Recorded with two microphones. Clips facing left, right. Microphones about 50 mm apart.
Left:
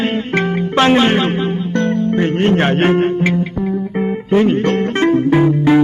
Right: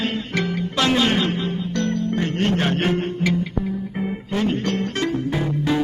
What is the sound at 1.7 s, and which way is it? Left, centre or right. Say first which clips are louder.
Music: left 7 dB; left.